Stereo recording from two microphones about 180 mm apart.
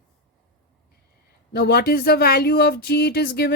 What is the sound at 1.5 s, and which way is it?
Speech, 60° left (ahead or behind).